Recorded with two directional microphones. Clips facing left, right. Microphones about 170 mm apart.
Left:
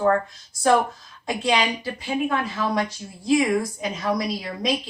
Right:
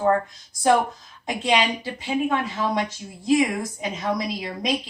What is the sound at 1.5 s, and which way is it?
Speech, 20° right (ahead or behind).